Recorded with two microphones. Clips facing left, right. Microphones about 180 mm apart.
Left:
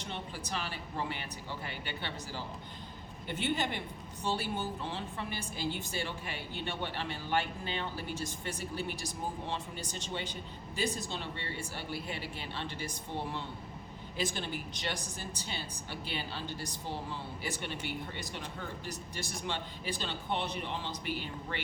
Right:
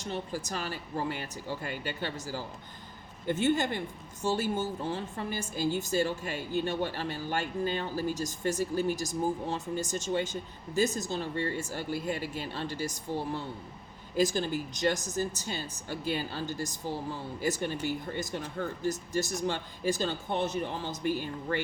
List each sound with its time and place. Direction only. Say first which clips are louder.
0.0 s speech: right 6 dB; 40° right (ahead or behind)